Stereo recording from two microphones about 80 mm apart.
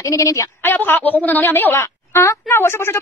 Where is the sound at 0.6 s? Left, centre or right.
Left.